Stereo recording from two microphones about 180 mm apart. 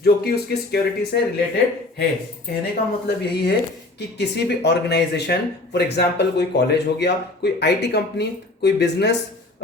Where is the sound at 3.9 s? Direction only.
70° left (ahead or behind).